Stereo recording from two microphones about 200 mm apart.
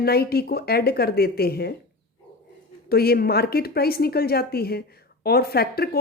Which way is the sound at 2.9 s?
50° left (ahead or behind).